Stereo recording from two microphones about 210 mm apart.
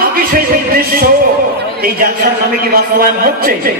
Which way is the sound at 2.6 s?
45° right (ahead or behind).